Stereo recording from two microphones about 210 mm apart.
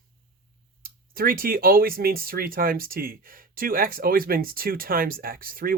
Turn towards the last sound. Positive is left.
turn(degrees=-45)  # may be behind; listen again after turning